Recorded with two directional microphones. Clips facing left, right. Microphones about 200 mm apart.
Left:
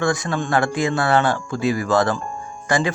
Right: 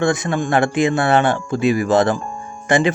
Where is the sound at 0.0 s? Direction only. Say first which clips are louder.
Right 3 dB; 20° right (ahead or behind).